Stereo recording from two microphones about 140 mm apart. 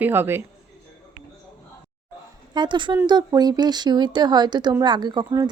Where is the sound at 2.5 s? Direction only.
35° right (ahead or behind).